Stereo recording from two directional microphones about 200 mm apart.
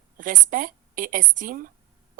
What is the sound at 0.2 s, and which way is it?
A woman's voice, 45° right (ahead or behind).